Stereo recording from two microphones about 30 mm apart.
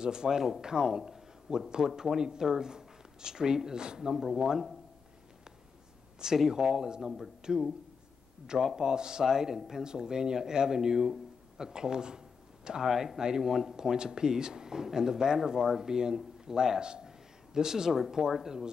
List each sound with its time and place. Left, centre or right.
0.0 s speech: right
4.2 s speech: centre
6.1 s speech: centre
8.7 s speech: right
9.3 s speech: centre